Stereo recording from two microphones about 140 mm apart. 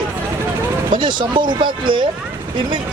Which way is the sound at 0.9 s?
35° right (ahead or behind).